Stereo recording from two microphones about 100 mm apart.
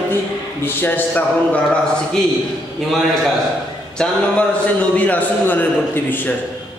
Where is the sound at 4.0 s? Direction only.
10° left (ahead or behind).